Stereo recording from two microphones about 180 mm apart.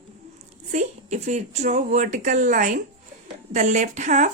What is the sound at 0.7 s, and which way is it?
A woman's voice, 40° right (ahead or behind).